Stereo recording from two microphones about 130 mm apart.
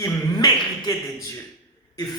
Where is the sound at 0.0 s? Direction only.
30° left (ahead or behind).